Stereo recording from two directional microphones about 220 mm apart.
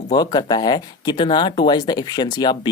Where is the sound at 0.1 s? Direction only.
20° left (ahead or behind).